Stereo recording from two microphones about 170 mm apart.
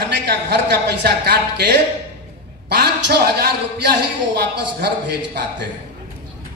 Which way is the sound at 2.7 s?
80° right.